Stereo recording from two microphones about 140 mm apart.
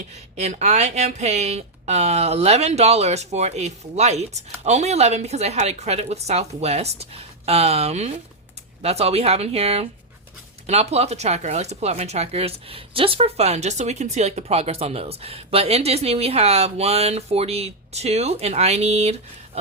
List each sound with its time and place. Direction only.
0.3 s speech: 55° right (ahead or behind)